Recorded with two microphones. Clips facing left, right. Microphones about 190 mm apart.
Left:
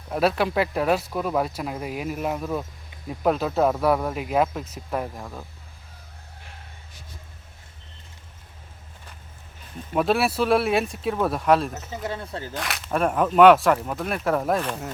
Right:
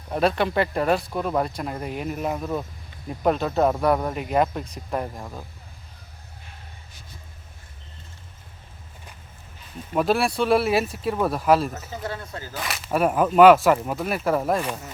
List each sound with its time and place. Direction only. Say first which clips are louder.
0.1 s speech: even; 5° left (ahead or behind)
9.9 s speech: even; centre (ahead or behind)
12.2 s speech: left 3 dB; 30° left (ahead or behind)
12.5 s speech: right 2 dB; centre (ahead or behind)